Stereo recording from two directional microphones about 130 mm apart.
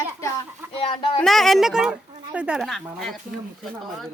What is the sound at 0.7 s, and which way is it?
Speech, 45° left (ahead or behind).